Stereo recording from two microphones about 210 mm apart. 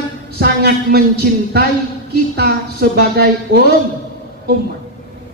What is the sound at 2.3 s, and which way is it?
A man's voice, 50° right (ahead or behind).